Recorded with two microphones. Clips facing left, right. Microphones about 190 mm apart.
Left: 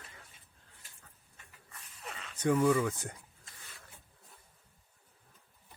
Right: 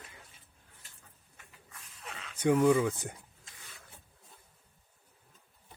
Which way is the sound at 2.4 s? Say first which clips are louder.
Right 3 dB; 10° right (ahead or behind).